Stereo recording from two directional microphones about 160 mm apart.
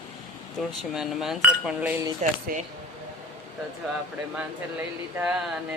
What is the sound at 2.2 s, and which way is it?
Speech, 45° right (ahead or behind).